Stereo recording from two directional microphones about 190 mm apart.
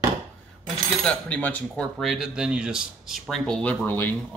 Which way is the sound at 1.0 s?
5° left (ahead or behind).